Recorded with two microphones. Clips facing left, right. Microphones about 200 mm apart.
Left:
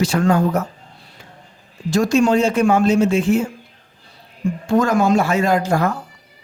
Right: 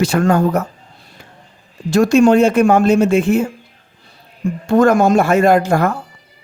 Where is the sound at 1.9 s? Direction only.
60° right (ahead or behind).